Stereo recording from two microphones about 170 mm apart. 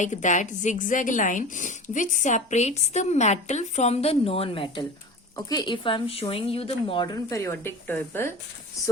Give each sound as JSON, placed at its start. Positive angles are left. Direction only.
{"t": 0.0, "sound": "a woman's voice", "side_deg": 45}